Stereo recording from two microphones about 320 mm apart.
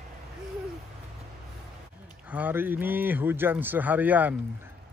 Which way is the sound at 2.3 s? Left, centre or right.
Centre.